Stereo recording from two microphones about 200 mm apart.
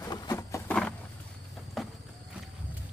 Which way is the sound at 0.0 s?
20° left (ahead or behind).